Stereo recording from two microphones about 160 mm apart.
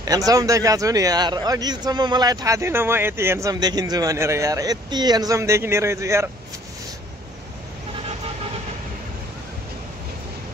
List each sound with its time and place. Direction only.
0.0 s speech: 25° right (ahead or behind)